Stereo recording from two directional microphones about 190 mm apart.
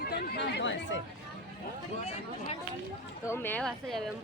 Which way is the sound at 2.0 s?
35° left (ahead or behind).